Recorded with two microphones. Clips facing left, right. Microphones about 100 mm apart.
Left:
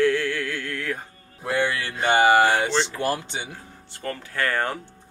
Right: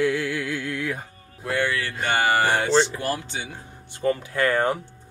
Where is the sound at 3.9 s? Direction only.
15° right (ahead or behind).